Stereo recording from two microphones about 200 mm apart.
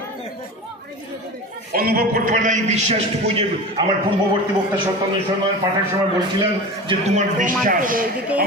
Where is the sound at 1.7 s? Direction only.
50° right (ahead or behind); by 3.8 s 30° right (ahead or behind).